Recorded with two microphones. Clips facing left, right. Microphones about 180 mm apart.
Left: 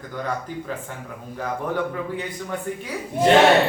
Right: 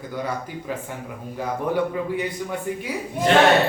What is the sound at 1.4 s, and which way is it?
Speech, 10° right (ahead or behind).